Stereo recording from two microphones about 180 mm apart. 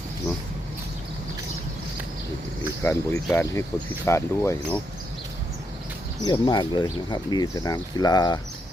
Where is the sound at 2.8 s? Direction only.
15° left (ahead or behind).